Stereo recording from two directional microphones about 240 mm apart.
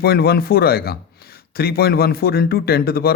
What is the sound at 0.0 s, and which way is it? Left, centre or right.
A man's voice, left.